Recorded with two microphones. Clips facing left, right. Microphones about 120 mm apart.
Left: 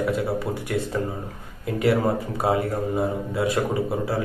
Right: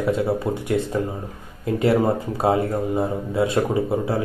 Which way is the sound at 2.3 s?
25° right (ahead or behind).